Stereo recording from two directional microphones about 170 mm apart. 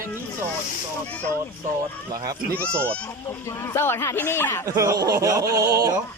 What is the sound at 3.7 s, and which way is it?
Speech, 15° left (ahead or behind).